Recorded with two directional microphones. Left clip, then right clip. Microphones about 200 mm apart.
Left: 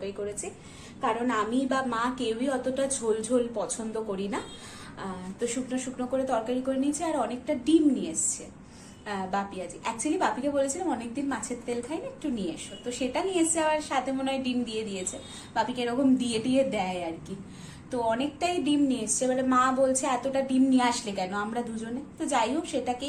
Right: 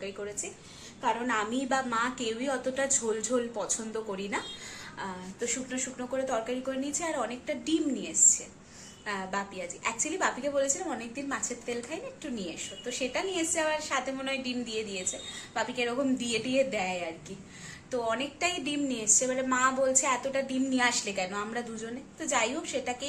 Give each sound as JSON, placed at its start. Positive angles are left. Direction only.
{"t": 1.0, "sound": "a woman's voice", "side_deg": -5}